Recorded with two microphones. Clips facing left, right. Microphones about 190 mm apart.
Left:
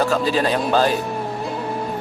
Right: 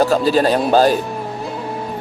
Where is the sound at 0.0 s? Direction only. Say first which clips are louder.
Right 5 dB; 40° right (ahead or behind).